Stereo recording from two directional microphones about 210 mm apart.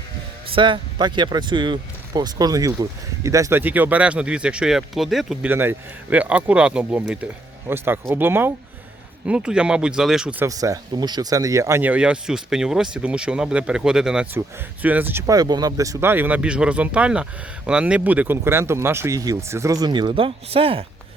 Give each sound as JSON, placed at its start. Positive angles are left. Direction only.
{"t": 0.5, "sound": "speech", "side_deg": -25}